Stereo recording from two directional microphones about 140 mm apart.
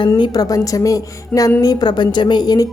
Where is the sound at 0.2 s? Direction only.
25° left (ahead or behind).